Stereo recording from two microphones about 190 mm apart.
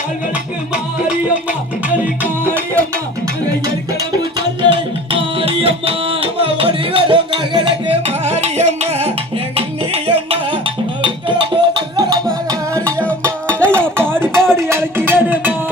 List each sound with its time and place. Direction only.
0.7 s music: 5° right (ahead or behind)
4.2 s music: 20° right (ahead or behind)
12.8 s music: 5° left (ahead or behind)
13.9 s a sound: 10° right (ahead or behind)
14.5 s music: 15° right (ahead or behind)